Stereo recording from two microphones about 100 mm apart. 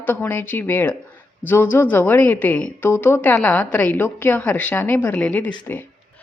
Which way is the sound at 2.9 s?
25° left (ahead or behind).